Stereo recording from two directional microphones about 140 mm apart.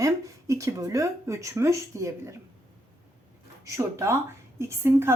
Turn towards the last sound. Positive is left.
turn(degrees=-20)  # may be behind; listen again after turning